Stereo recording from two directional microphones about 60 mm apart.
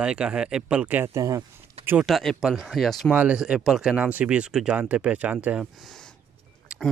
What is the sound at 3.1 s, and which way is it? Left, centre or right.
Speech, right.